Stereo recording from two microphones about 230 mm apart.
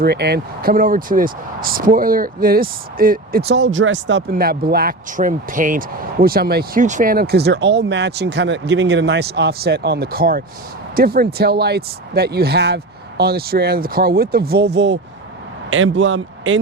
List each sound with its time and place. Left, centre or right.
0.0 s a man's voice: right